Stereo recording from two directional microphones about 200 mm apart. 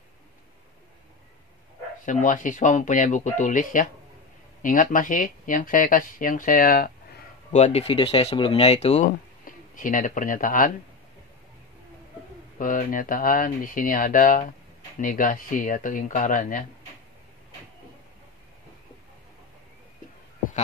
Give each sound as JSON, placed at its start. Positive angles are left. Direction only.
{"t": 2.0, "sound": "speech", "side_deg": 40}
{"t": 7.5, "sound": "speech", "side_deg": 30}
{"t": 12.5, "sound": "speech", "side_deg": 40}